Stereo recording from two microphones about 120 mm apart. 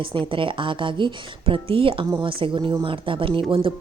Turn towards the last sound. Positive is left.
turn(degrees=-45)  # may be behind; listen again after turning